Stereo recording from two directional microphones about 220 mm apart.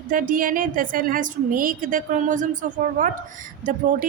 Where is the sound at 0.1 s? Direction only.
40° right (ahead or behind).